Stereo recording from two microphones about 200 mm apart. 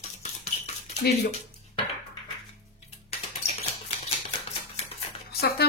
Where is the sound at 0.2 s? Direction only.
35° left (ahead or behind).